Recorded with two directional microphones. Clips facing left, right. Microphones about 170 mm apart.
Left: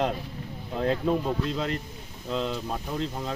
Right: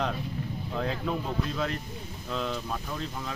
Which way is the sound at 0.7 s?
25° left (ahead or behind).